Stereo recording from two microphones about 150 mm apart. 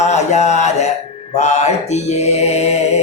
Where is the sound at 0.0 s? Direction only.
50° left (ahead or behind).